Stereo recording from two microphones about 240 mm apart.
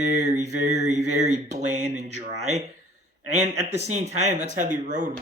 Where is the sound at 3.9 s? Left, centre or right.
Right.